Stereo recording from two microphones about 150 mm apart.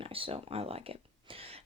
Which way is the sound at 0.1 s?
40° right (ahead or behind).